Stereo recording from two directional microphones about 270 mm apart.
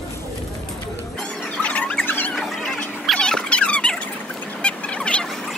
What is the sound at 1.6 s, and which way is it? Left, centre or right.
Squeal, centre.